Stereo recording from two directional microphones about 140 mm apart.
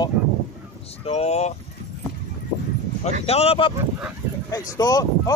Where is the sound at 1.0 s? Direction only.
50° left (ahead or behind).